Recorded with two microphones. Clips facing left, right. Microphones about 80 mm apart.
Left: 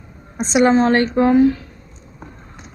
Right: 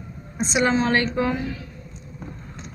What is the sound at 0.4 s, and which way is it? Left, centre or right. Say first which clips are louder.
Speech: left 7 dB; left.